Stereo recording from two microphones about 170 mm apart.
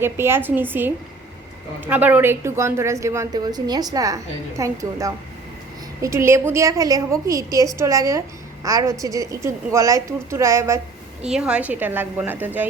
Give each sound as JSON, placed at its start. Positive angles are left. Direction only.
{"t": 0.0, "sound": "a woman's voice", "side_deg": -15}
{"t": 11.3, "sound": "a woman's voice", "side_deg": -5}